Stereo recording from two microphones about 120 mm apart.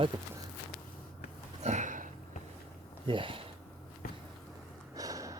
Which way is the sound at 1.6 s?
90° right.